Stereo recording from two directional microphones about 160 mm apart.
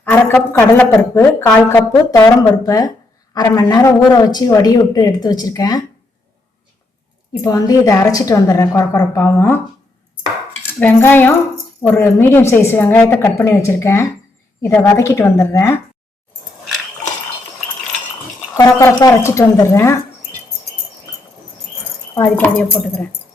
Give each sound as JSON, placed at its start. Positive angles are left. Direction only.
{"t": 0.0, "sound": "a woman's voice", "side_deg": 10}
{"t": 2.0, "sound": "speech", "side_deg": 20}
{"t": 7.4, "sound": "speech", "side_deg": 20}
{"t": 10.8, "sound": "a woman's voice", "side_deg": 10}
{"t": 18.5, "sound": "a woman's voice", "side_deg": 20}
{"t": 22.1, "sound": "a woman's voice", "side_deg": 10}